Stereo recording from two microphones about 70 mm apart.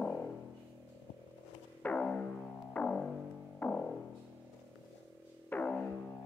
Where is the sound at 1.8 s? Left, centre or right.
Centre.